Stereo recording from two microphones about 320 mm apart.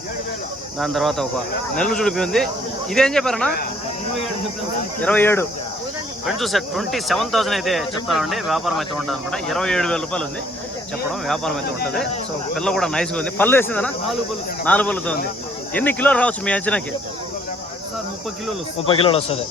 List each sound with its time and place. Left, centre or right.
0.8 s speech: centre
5.0 s speech: centre
11.3 s speech: centre
18.9 s speech: centre